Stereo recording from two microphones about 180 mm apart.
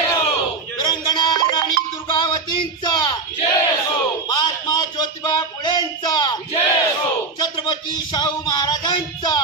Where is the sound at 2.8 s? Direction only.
25° left (ahead or behind).